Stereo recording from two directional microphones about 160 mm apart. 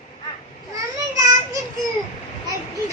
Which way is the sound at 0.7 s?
20° right (ahead or behind).